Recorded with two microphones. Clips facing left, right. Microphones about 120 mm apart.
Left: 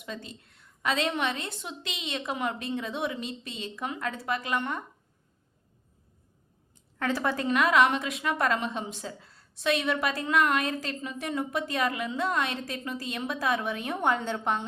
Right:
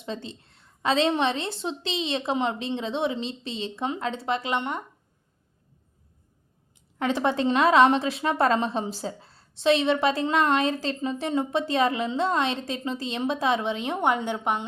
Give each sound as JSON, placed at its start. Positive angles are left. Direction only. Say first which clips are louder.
{"t": 0.0, "sound": "a woman's voice", "louder": "right 5 dB", "side_deg": -25}
{"t": 7.0, "sound": "a woman's voice", "louder": "right 5 dB", "side_deg": -20}